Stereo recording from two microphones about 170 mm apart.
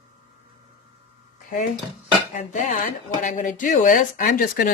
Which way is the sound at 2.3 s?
45° left (ahead or behind).